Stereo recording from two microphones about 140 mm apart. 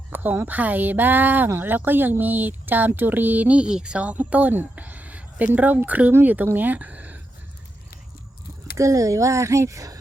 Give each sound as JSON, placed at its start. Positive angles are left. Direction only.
{"t": 0.1, "sound": "speech", "side_deg": -15}
{"t": 8.8, "sound": "speech", "side_deg": -20}